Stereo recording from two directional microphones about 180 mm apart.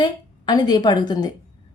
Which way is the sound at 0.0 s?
25° left (ahead or behind).